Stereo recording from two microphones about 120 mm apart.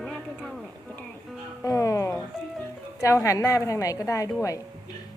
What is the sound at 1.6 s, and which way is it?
Music, 25° left (ahead or behind).